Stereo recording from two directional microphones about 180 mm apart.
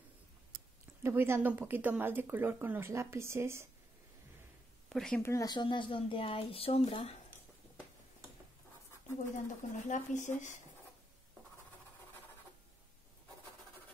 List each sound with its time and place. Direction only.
1.0 s speech: 15° right (ahead or behind)
4.8 s speech: centre (ahead or behind)
5.2 s speech: 20° left (ahead or behind); by 7.2 s 35° left (ahead or behind)
9.2 s speech: 45° left (ahead or behind)